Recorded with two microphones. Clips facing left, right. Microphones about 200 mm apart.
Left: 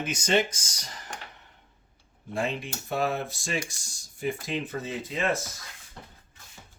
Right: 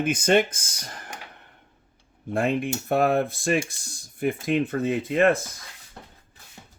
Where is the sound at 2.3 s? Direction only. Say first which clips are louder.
Right 7 dB; 55° right (ahead or behind).